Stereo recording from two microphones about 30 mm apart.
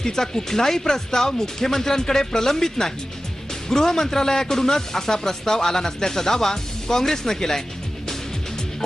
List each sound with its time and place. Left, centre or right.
0.0 s speech: centre